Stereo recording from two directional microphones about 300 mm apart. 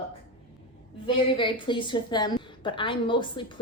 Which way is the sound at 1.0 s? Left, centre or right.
Centre.